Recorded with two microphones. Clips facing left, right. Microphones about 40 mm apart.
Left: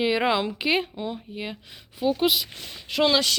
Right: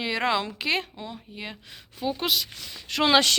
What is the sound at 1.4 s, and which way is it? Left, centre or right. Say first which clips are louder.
Speech: left 3 dB; centre.